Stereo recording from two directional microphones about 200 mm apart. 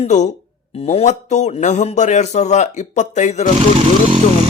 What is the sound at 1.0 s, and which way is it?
Speech, 35° left (ahead or behind).